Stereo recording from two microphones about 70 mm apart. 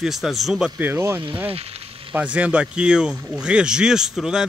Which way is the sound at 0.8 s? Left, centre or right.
Right.